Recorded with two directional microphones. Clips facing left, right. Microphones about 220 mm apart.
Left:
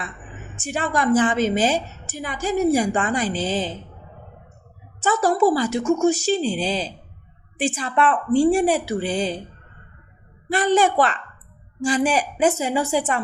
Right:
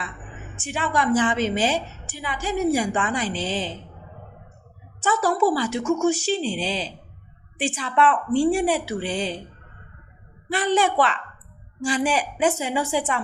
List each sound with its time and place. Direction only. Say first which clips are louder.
0.6 s a woman's voice: left 2 dB; 45° left (ahead or behind)
5.0 s a woman's voice: left 3 dB; 45° left (ahead or behind)
10.5 s a woman's voice: left 3 dB; 45° left (ahead or behind)